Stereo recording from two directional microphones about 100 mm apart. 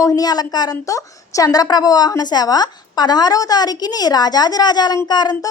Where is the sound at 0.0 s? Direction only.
40° left (ahead or behind).